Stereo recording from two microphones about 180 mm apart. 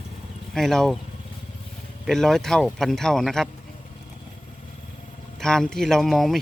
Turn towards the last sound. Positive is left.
turn(degrees=0)  # may be behind; listen again after turning